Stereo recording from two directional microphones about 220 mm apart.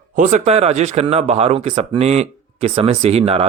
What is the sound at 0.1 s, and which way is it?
Speech, 35° right (ahead or behind).